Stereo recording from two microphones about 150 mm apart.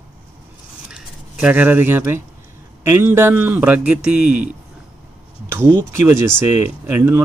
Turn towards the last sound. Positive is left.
turn(degrees=-15)  # may be behind; listen again after turning